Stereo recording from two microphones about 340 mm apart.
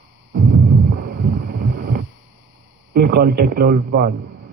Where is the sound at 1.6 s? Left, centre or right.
Right.